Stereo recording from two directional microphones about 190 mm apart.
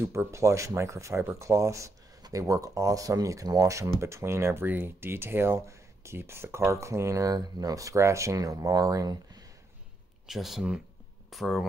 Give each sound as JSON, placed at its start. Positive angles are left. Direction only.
{"t": 0.0, "sound": "speech", "side_deg": -15}
{"t": 10.2, "sound": "speech", "side_deg": 0}